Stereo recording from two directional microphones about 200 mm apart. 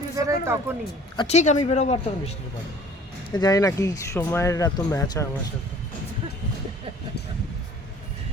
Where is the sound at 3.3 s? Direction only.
20° left (ahead or behind).